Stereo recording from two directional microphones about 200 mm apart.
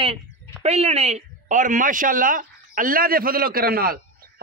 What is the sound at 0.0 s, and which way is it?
Speech, 30° right (ahead or behind).